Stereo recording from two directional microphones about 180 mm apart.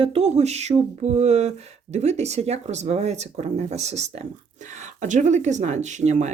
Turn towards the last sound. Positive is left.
turn(degrees=-40)  # may be behind; listen again after turning